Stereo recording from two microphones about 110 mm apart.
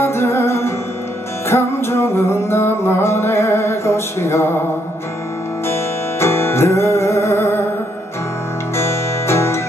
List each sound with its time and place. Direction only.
0.0 s music: 25° left (ahead or behind)
5.7 s music: 25° left (ahead or behind)
8.7 s music: 25° left (ahead or behind)